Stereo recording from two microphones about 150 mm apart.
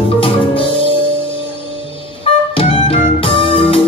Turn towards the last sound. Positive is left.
turn(degrees=40)  # may be behind; listen again after turning